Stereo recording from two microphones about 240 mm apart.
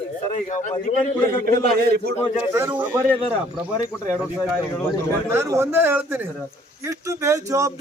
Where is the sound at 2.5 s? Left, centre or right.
Centre.